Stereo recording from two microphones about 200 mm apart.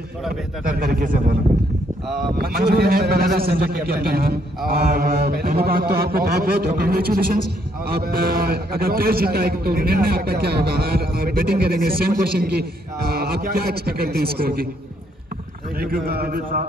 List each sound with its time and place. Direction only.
0.7 s a man's voice: 50° right (ahead or behind)
2.3 s a man's voice: 50° right (ahead or behind)
15.8 s a man's voice: 50° right (ahead or behind)